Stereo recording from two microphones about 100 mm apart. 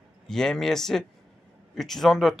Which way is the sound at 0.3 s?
5° left (ahead or behind).